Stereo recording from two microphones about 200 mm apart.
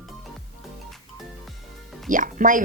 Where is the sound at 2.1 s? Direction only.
40° right (ahead or behind).